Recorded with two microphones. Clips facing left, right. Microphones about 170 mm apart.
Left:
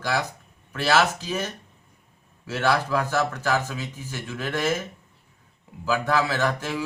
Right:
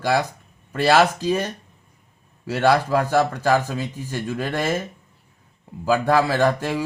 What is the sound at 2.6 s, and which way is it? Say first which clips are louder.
Speech: right 5 dB; 50° right (ahead or behind).